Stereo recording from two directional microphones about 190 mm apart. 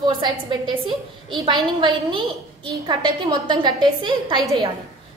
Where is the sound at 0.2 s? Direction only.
25° right (ahead or behind).